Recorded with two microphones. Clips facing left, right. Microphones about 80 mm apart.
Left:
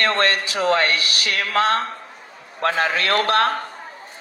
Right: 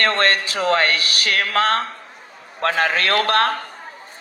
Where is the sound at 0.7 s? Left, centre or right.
Right.